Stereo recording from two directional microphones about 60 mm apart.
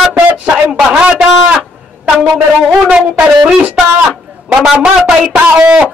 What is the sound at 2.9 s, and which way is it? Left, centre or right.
Speech, right.